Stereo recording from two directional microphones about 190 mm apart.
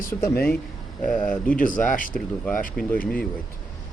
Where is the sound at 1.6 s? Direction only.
45° left (ahead or behind).